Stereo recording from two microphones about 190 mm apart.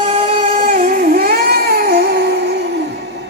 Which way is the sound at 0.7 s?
45° right (ahead or behind).